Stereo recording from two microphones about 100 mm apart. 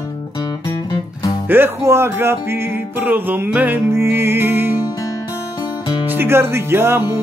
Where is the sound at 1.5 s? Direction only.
25° right (ahead or behind).